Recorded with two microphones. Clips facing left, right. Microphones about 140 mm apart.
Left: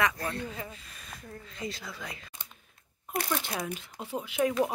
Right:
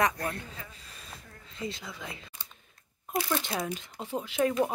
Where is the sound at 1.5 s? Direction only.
25° right (ahead or behind).